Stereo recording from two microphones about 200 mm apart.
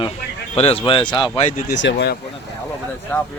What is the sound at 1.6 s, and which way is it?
Speech, 55° left (ahead or behind).